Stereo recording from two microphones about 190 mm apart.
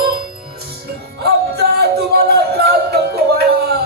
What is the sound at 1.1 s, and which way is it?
Music, 60° right (ahead or behind).